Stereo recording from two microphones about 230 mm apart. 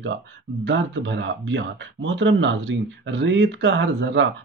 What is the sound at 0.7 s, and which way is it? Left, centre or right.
Speech, right.